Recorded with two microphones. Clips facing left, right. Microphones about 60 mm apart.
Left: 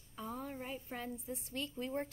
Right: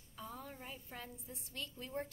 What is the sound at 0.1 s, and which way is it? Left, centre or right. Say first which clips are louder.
A woman's voice: left 5 dB; left.